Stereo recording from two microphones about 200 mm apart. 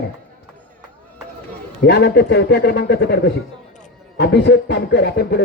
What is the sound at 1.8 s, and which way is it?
A man's voice, 55° left (ahead or behind).